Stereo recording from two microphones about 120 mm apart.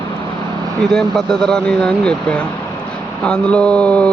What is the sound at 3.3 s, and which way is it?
Speech, 10° left (ahead or behind).